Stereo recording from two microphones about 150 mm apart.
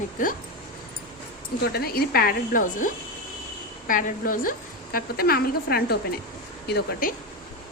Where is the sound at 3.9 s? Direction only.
65° left (ahead or behind); by 5.9 s 90° left.